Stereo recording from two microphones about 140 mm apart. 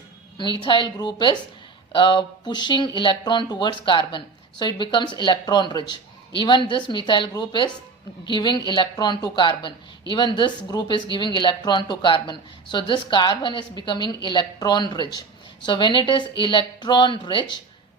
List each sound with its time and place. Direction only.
0.6 s speech: 35° left (ahead or behind)